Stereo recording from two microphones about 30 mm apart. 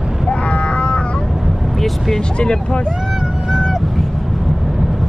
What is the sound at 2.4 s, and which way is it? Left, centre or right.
Speech, left.